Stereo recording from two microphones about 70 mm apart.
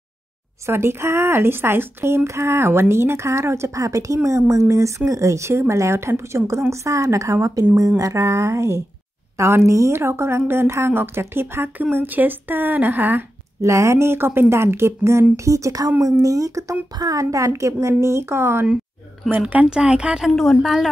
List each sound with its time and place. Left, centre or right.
0.7 s a woman's voice: right
13.6 s a woman's voice: right
19.4 s speech: centre
20.3 s a woman's voice: centre